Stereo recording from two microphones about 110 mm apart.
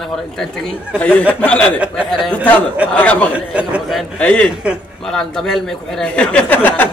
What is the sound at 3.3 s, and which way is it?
Speech, 10° right (ahead or behind).